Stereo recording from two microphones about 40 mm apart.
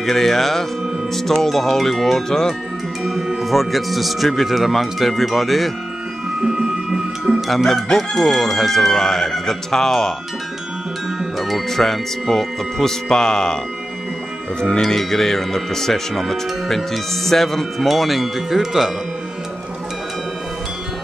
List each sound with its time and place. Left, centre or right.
0.0 s speech: centre
3.0 s speech: centre
6.4 s music: centre
7.4 s speech: centre
11.3 s speech: centre
14.6 s speech: centre